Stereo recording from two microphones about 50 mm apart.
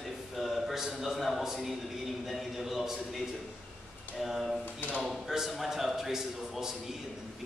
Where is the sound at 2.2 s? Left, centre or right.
Centre.